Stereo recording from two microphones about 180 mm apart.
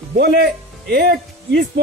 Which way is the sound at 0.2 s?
65° right (ahead or behind).